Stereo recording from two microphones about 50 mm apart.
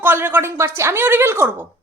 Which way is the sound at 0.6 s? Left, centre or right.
Right.